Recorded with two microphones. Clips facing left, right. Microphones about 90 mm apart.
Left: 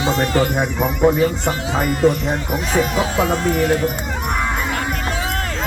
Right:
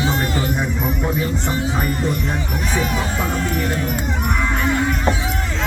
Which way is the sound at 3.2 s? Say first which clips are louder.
Left 4 dB; 90° left.